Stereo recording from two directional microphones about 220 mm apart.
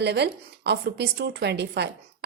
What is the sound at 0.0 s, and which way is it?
Speech, 50° right (ahead or behind).